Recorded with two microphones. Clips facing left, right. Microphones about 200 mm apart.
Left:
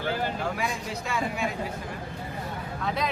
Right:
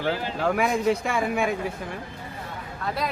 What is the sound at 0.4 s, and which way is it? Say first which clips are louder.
Speech: right 9 dB; 60° right (ahead or behind).